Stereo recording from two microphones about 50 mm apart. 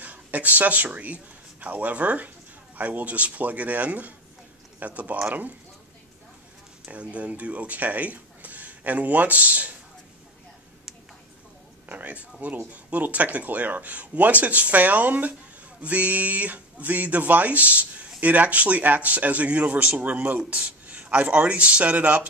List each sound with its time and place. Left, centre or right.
0.0 s speech: right
6.9 s speech: right
11.9 s speech: right